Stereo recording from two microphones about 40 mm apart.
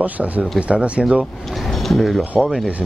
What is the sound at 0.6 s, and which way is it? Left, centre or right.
Speech, right.